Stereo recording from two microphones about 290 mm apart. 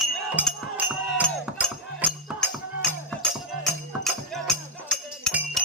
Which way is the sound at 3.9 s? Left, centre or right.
Centre.